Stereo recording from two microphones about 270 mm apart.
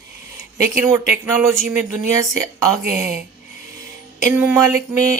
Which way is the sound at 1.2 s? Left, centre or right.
Centre.